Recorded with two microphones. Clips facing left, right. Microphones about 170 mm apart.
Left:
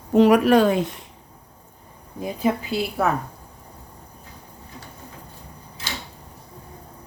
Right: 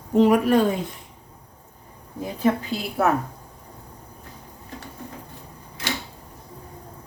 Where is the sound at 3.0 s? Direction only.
5° right (ahead or behind).